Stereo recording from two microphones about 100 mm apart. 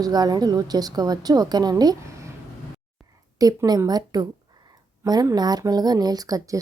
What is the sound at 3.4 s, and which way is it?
Speech, 35° right (ahead or behind).